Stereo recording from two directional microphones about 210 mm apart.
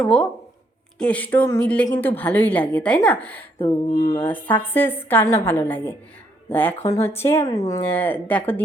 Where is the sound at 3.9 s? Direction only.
35° left (ahead or behind).